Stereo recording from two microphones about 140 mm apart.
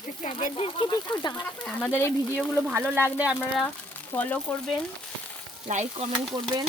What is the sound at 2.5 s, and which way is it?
Speech, 5° right (ahead or behind).